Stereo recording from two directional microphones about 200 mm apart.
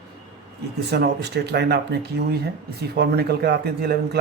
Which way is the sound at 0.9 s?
55° right (ahead or behind).